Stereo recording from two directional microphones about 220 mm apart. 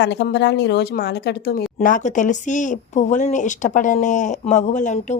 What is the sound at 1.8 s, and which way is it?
Speech, 35° left (ahead or behind).